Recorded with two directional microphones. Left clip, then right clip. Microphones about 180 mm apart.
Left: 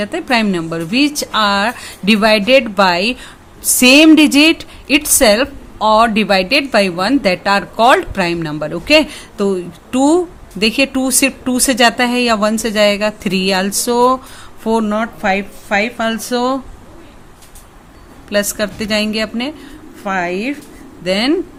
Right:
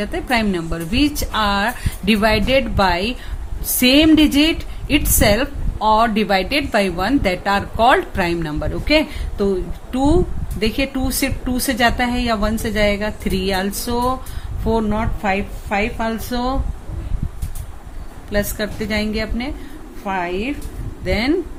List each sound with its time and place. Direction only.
0.0 s a woman's voice: 25° left (ahead or behind)
18.3 s a woman's voice: 30° left (ahead or behind)